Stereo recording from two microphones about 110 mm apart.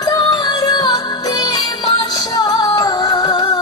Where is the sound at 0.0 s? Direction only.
35° left (ahead or behind).